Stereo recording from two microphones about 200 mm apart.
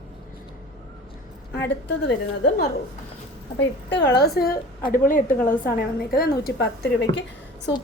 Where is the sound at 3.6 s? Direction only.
60° left (ahead or behind).